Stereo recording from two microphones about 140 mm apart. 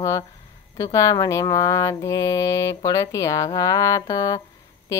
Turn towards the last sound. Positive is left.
turn(degrees=20)  # may be behind; listen again after turning